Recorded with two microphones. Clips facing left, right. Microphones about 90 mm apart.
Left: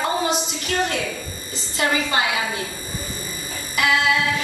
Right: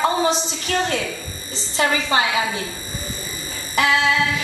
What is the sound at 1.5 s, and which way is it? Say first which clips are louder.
Speech: right 2 dB; 30° right (ahead or behind).